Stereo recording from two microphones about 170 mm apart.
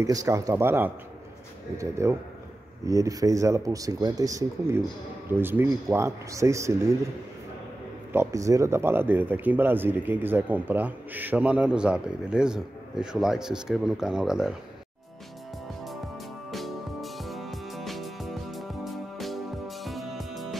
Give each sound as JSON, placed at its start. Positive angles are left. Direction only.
{"t": 0.0, "sound": "speech", "side_deg": -20}
{"t": 8.1, "sound": "speech", "side_deg": -15}
{"t": 16.4, "sound": "music", "side_deg": 0}